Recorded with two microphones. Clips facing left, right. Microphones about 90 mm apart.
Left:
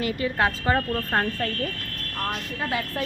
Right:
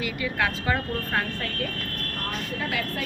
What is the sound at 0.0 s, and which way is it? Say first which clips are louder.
Speech: left 3 dB; 35° left (ahead or behind).